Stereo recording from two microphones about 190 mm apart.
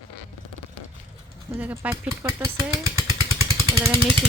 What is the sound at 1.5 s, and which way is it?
Speech, 15° right (ahead or behind).